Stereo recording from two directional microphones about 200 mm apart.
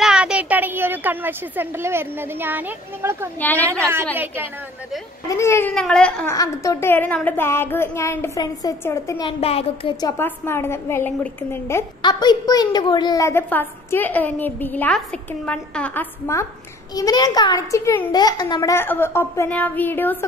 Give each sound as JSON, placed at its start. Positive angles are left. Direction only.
{"t": 0.0, "sound": "a child's voice", "side_deg": -5}
{"t": 3.3, "sound": "a woman's voice", "side_deg": 10}
{"t": 5.3, "sound": "a woman's voice", "side_deg": 15}
{"t": 6.3, "sound": "a woman's voice", "side_deg": 15}
{"t": 9.4, "sound": "speech", "side_deg": 30}
{"t": 10.0, "sound": "a woman's voice", "side_deg": 10}